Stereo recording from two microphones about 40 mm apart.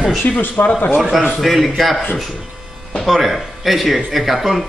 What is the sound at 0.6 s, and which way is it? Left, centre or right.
Speech, left.